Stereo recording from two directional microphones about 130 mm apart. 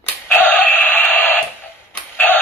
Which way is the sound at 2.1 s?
15° left (ahead or behind).